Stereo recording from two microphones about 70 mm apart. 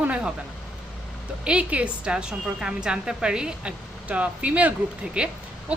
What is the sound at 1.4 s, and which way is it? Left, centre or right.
A woman's voice, centre.